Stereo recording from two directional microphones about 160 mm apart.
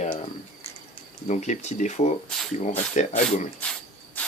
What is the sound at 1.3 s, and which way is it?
Speech, 45° left (ahead or behind).